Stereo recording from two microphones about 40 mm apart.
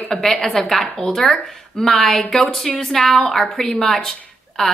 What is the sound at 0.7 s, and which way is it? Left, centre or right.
A woman's voice, centre.